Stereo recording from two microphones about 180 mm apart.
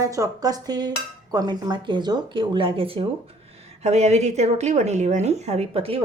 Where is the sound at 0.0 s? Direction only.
20° right (ahead or behind).